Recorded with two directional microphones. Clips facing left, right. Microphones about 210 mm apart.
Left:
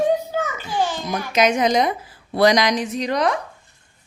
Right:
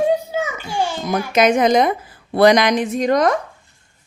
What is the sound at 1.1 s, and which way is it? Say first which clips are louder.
Speech: right 5 dB; 55° right (ahead or behind).